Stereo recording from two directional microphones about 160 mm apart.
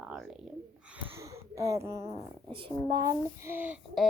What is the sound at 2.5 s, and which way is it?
Speech, 30° right (ahead or behind).